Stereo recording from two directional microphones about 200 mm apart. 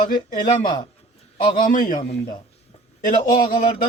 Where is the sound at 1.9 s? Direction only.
35° left (ahead or behind).